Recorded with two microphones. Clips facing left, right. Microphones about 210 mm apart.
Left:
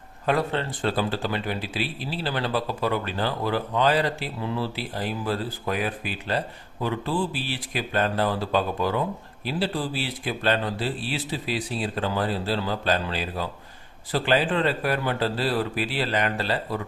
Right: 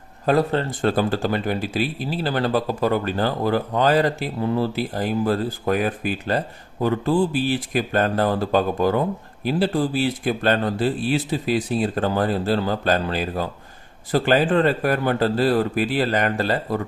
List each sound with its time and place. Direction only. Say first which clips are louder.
0.3 s speech: right 5 dB; 40° right (ahead or behind)